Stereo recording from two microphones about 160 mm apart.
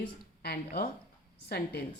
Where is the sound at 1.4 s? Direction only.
80° left.